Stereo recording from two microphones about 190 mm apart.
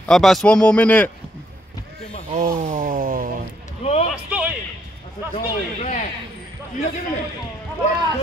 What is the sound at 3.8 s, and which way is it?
Speech, 35° left (ahead or behind).